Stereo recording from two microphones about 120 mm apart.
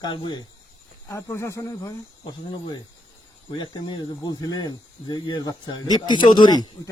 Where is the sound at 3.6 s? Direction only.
40° left (ahead or behind).